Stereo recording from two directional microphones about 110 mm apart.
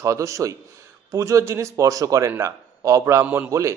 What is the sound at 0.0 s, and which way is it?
A man's voice, 25° right (ahead or behind).